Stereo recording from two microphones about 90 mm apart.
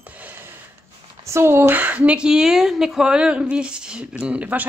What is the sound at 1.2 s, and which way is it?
A woman's voice, 30° right (ahead or behind).